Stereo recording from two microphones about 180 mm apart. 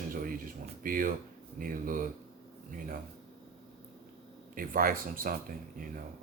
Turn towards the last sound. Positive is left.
turn(degrees=-50)  # may be behind; listen again after turning